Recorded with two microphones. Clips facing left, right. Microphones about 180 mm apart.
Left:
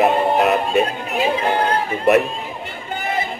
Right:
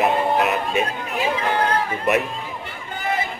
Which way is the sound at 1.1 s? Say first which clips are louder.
Left 3 dB; 25° left (ahead or behind).